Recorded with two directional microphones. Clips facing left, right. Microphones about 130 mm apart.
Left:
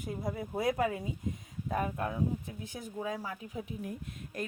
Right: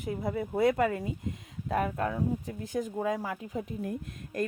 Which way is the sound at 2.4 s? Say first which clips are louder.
Right 9 dB; 40° right (ahead or behind).